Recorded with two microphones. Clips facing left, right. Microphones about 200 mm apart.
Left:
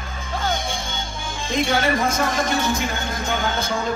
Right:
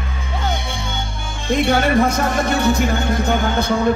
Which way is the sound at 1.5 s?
60° right (ahead or behind).